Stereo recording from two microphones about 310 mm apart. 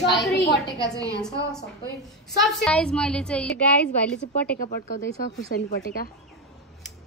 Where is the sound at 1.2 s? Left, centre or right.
Centre.